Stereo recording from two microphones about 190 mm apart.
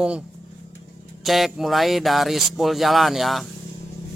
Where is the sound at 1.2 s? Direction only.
Centre (ahead or behind).